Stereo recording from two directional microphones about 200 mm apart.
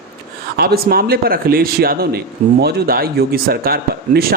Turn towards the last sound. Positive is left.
turn(degrees=-50)  # may be behind; listen again after turning